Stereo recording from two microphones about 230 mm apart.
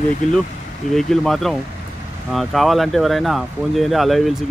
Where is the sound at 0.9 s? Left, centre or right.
Centre.